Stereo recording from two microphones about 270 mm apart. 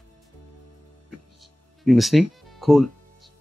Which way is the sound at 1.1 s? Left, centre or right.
Right.